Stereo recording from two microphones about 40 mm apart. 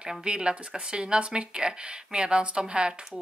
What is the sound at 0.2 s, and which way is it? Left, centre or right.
Speech, right.